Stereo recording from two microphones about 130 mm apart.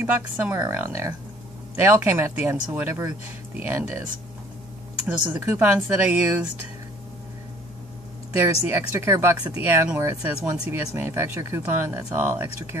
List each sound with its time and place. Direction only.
0.0 s speech: 15° right (ahead or behind)
5.0 s speech: 15° right (ahead or behind)
8.4 s speech: 20° right (ahead or behind)